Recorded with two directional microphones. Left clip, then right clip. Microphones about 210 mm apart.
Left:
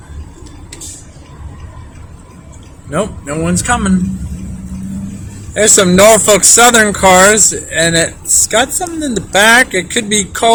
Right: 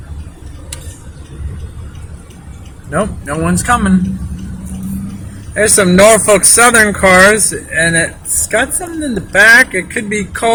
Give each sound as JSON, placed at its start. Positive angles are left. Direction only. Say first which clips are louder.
{"t": 2.9, "sound": "speech", "louder": "right 1 dB", "side_deg": 15}
{"t": 5.5, "sound": "speech", "louder": "left 1 dB", "side_deg": 15}